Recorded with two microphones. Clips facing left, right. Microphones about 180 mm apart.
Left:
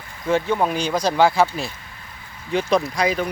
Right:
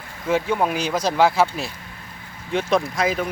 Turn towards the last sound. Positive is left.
turn(degrees=0)  # may be behind; listen again after turning